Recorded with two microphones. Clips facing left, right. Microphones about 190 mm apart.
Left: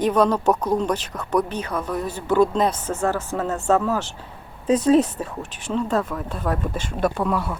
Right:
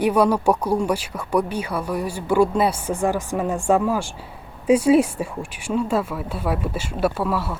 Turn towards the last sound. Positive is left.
turn(degrees=-5)  # may be behind; listen again after turning